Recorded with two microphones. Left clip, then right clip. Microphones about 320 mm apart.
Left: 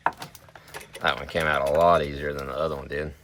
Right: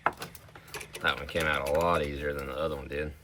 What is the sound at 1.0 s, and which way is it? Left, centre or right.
Speech, centre.